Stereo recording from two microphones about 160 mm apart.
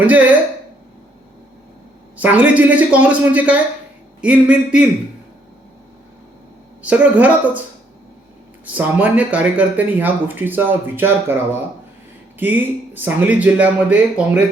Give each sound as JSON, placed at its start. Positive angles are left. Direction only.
{"t": 2.1, "sound": "speech", "side_deg": -10}
{"t": 6.8, "sound": "speech", "side_deg": -10}
{"t": 8.6, "sound": "speech", "side_deg": -10}
{"t": 12.4, "sound": "speech", "side_deg": -10}